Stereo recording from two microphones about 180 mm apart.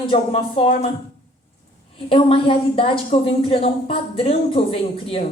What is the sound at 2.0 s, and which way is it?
A woman's voice, 30° left (ahead or behind).